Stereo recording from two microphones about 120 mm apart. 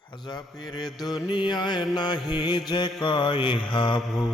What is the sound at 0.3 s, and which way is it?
Mantra, 35° left (ahead or behind).